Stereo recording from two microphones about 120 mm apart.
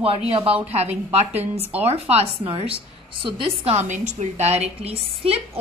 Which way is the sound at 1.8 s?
55° right (ahead or behind).